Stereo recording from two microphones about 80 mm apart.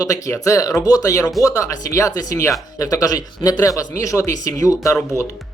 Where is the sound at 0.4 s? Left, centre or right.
Left.